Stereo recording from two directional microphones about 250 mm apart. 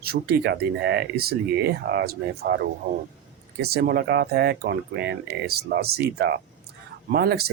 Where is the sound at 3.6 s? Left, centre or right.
Right.